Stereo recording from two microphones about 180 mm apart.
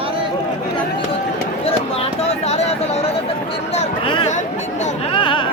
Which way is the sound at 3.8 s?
30° left (ahead or behind).